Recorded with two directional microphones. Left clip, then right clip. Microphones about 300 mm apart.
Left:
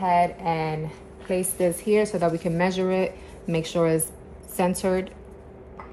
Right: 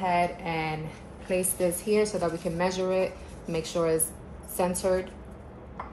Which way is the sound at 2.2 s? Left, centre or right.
Left.